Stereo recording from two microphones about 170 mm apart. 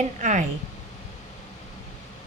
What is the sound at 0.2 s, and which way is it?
Speech, 45° right (ahead or behind).